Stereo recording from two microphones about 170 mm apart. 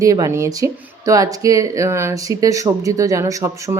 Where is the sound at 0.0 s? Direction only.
20° right (ahead or behind).